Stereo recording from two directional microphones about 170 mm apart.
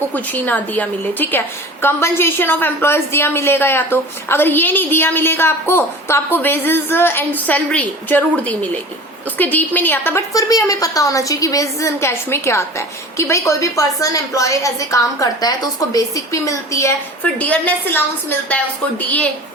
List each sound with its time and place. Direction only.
0.1 s a woman's voice: 10° left (ahead or behind)